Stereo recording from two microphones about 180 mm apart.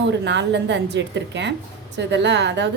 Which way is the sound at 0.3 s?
80° right.